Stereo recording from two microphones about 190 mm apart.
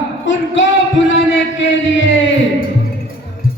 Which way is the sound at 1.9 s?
70° left (ahead or behind).